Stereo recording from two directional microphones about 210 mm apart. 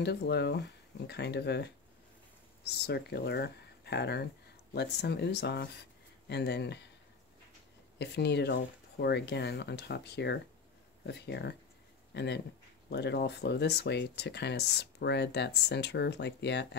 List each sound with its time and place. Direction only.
0.0 s speech: 50° left (ahead or behind)
8.0 s speech: 55° left (ahead or behind)